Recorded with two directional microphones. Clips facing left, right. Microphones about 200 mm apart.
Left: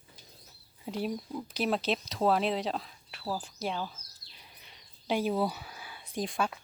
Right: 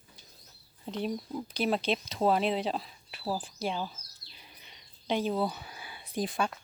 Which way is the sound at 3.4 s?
Centre (ahead or behind).